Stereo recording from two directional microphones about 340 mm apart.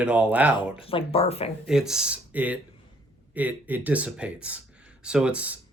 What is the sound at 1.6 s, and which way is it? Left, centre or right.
Speech, centre.